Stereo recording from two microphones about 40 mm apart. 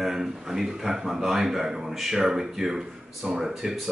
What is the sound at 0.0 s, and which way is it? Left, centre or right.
A man's voice, centre.